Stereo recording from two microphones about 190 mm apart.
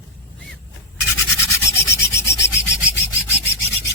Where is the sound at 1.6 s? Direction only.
15° left (ahead or behind).